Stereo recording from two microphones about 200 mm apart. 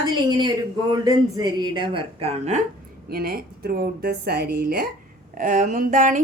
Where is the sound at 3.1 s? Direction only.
50° right (ahead or behind).